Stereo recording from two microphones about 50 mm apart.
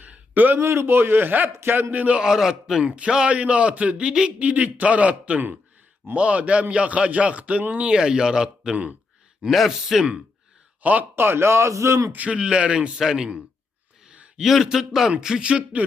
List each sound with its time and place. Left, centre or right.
0.0 s a sound: right
0.6 s a man's voice: right
1.9 s a man's voice: right
2.1 s speech: centre
2.8 s a man's voice: right
7.8 s speech: centre
8.7 s a man's voice: right
9.5 s a man's voice: centre
11.1 s speech: right
12.1 s a man's voice: right
13.0 s speech: centre
14.3 s a man's voice: centre; by 15.8 s right